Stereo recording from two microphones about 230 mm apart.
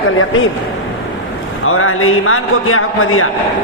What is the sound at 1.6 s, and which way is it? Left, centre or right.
A man's voice, left.